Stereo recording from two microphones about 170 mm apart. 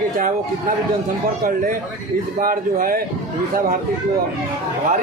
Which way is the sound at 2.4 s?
55° right (ahead or behind).